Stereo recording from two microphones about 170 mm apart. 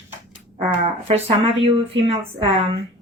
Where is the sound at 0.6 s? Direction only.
35° right (ahead or behind).